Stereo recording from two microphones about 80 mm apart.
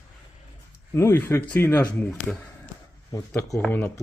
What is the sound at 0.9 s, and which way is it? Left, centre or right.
Speech, left.